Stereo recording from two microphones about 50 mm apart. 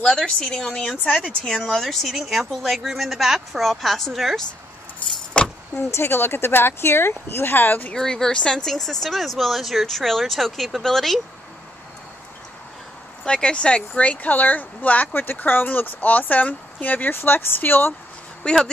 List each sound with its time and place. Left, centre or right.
0.0 s speech: centre
5.4 s keys jangling: left
5.9 s speech: left
7.9 s speech: centre
13.2 s speech: centre; by 17.1 s left
17.1 s speech: left
18.4 s speech: centre